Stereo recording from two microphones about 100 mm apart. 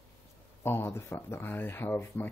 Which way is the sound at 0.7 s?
25° left (ahead or behind).